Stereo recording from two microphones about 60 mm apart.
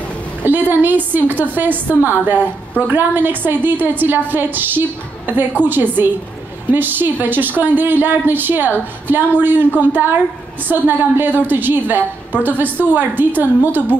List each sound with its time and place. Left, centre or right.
0.4 s a woman's voice: right